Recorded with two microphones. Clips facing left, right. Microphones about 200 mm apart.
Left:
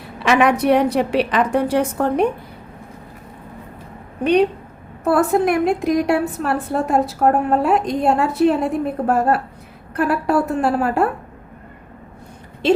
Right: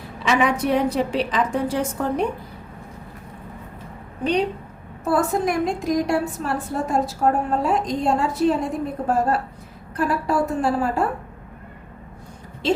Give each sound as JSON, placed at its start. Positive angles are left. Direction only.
{"t": 0.2, "sound": "a woman's voice", "side_deg": 65}
{"t": 4.2, "sound": "a woman's voice", "side_deg": 60}